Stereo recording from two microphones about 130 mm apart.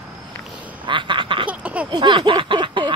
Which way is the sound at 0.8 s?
40° right (ahead or behind).